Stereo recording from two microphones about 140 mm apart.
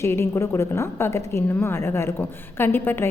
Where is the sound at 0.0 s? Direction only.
20° left (ahead or behind).